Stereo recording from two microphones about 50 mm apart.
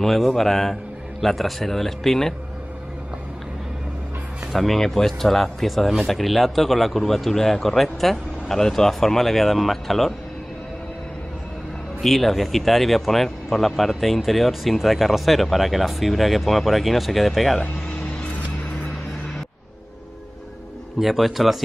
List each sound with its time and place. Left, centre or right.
0.0 s speech: centre
4.5 s speech: centre
12.0 s speech: centre
17.6 s a sound: left
21.0 s speech: centre